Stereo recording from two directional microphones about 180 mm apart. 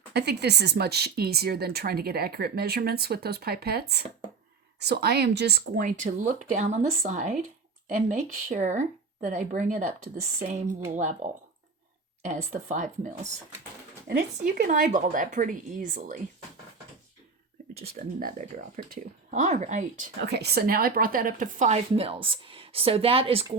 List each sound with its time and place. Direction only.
0.1 s speech: 65° right (ahead or behind)
5.8 s a woman's voice: 45° right (ahead or behind)
14.1 s speech: 50° right (ahead or behind)
17.8 s speech: 50° right (ahead or behind)
20.2 s a woman's voice: 65° right (ahead or behind); by 23.5 s 30° right (ahead or behind)